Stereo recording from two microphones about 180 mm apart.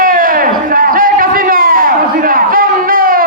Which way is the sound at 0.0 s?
50° right (ahead or behind).